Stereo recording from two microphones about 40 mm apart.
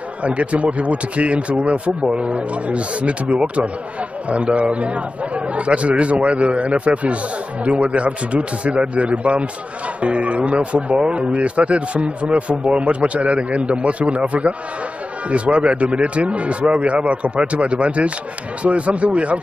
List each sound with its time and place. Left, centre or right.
0.2 s speech: right